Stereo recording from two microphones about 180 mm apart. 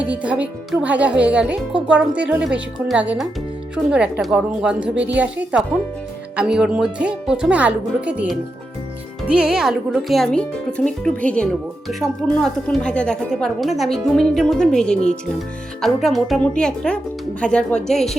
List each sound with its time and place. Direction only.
0.0 s speech: 5° right (ahead or behind)